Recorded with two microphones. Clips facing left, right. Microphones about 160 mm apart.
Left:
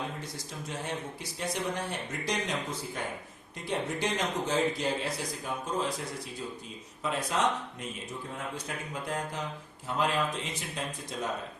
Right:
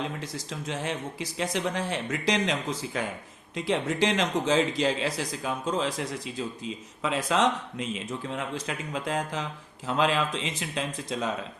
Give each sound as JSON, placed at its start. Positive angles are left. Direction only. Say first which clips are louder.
{"t": 0.2, "sound": "a man's voice", "louder": "right 4 dB", "side_deg": -90}